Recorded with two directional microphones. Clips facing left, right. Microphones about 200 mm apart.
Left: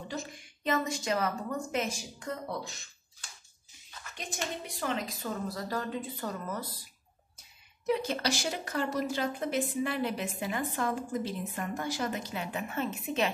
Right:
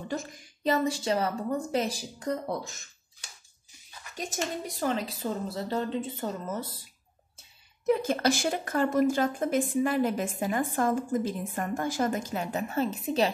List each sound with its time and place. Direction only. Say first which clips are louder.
0.7 s a woman's voice: right 4 dB; 30° right (ahead or behind)
4.2 s a woman's voice: right 5 dB; 40° right (ahead or behind)
7.8 s a woman's voice: right 5 dB; 50° right (ahead or behind)